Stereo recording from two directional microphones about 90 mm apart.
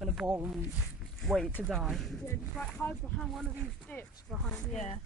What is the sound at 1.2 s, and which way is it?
Speech, 5° left (ahead or behind).